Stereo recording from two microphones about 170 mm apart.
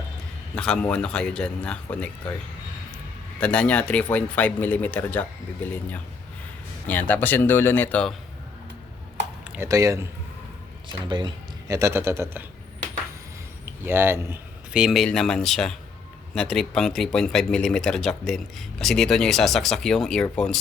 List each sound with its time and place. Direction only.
0.5 s speech: 5° left (ahead or behind)
3.4 s speech: 5° left (ahead or behind)
6.8 s speech: 10° left (ahead or behind)
9.5 s speech: 15° right (ahead or behind)
11.7 s speech: 15° right (ahead or behind)
13.8 s speech: 10° right (ahead or behind); by 20.6 s 5° left (ahead or behind)